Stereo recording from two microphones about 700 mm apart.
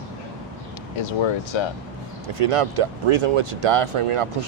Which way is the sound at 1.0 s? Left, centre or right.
Left.